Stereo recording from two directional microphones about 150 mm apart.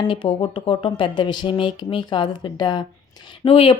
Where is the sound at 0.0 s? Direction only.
35° left (ahead or behind).